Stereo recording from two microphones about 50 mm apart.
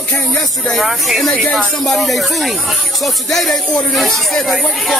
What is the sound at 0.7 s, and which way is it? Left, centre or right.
Speech, centre.